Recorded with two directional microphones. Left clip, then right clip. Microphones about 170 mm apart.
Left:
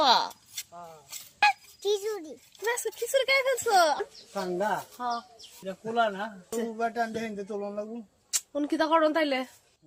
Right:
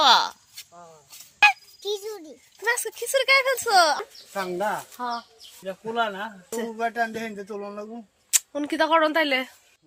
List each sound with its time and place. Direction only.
0.0 s a sound: centre (ahead or behind)
1.4 s music: centre (ahead or behind)
1.8 s a sound: 30° left (ahead or behind)
2.6 s speech: 5° right (ahead or behind)
5.0 s speech: 40° right (ahead or behind)
5.6 s speech: 25° right (ahead or behind)